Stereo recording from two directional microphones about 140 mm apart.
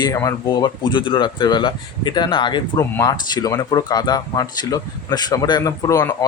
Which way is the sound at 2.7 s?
25° left (ahead or behind).